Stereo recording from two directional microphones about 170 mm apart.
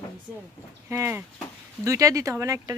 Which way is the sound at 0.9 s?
15° right (ahead or behind).